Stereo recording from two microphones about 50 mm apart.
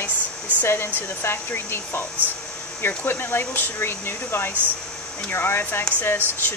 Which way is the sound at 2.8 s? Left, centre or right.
Left.